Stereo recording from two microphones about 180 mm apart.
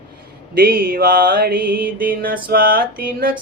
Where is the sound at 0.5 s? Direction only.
55° right (ahead or behind).